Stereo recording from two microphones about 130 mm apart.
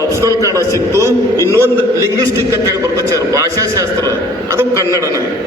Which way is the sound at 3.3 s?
25° right (ahead or behind).